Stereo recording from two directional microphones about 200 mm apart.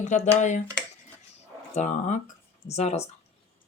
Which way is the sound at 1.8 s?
35° left (ahead or behind).